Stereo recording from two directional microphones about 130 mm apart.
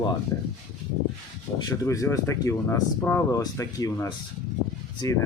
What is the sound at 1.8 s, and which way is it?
Speech, 25° left (ahead or behind).